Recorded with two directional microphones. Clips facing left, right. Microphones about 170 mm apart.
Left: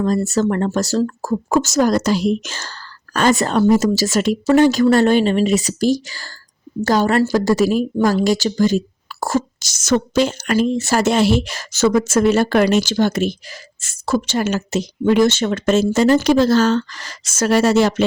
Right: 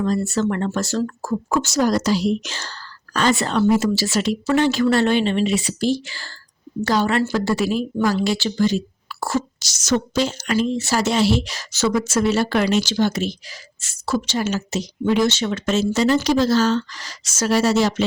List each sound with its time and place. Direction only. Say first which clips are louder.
0.0 s a woman's voice: left 3 dB; 45° left (ahead or behind)